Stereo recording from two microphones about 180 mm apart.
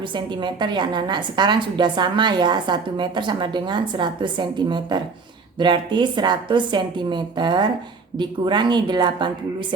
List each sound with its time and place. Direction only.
0.1 s a woman's voice: 25° right (ahead or behind)